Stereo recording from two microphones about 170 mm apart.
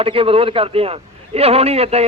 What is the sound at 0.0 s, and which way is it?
A man's voice, 35° right (ahead or behind).